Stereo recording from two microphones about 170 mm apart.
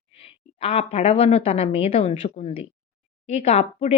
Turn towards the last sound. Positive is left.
turn(degrees=40)  # may be behind; listen again after turning